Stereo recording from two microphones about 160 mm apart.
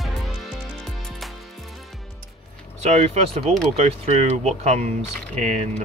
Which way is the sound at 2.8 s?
45° right (ahead or behind).